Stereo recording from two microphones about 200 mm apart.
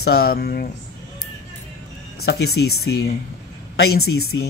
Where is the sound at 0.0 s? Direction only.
50° left (ahead or behind).